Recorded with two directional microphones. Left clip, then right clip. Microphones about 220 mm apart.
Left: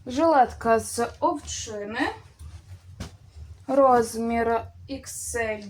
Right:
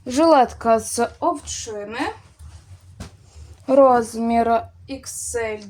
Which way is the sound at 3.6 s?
45° right (ahead or behind).